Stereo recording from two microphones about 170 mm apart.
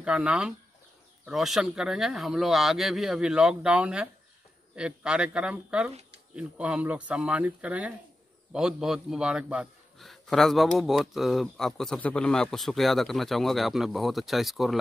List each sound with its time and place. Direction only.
0.0 s a man's voice: 5° right (ahead or behind)